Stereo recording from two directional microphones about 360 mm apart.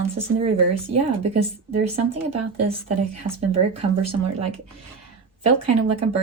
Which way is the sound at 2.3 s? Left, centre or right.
Right.